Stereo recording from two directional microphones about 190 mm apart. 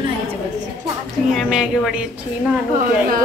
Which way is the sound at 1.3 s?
Centre (ahead or behind).